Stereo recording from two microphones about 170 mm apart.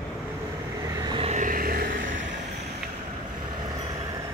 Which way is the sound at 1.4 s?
55° right (ahead or behind).